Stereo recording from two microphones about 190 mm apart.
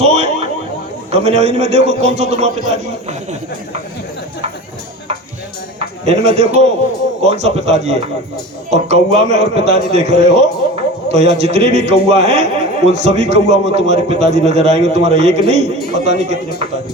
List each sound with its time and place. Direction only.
0.0 s a sound: 35° right (ahead or behind)
1.1 s a man's voice: 35° right (ahead or behind)
6.1 s a man's voice: 35° right (ahead or behind)